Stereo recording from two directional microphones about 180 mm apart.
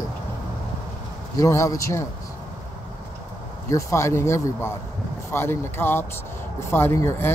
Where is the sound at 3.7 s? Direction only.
15° left (ahead or behind).